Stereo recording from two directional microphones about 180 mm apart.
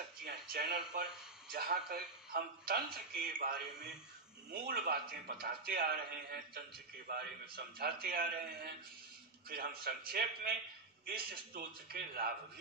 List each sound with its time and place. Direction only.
0.2 s speech: 60° right (ahead or behind)
9.8 s speech: 60° right (ahead or behind)